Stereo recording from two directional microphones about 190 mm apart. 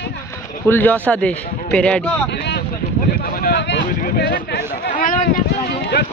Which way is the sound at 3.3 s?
60° left (ahead or behind).